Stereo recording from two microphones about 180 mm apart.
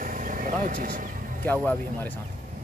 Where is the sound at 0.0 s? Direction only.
45° right (ahead or behind).